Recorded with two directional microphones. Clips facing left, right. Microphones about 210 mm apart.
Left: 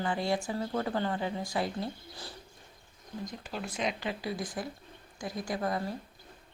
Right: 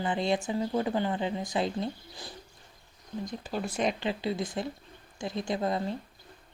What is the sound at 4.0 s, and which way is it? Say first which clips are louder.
Speech: right 4 dB; 25° right (ahead or behind).